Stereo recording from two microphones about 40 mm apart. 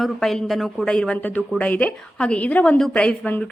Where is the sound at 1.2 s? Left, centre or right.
Left.